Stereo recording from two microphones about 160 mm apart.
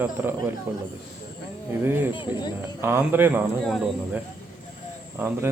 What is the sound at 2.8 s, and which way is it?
Speech, 15° right (ahead or behind).